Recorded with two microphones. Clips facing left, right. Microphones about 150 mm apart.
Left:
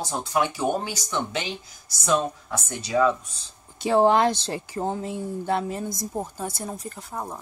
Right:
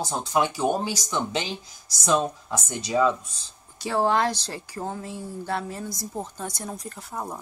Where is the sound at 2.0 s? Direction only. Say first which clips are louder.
Even; 15° right (ahead or behind).